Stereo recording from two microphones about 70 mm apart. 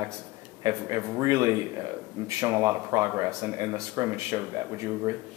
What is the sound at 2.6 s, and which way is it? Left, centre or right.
Speech, right.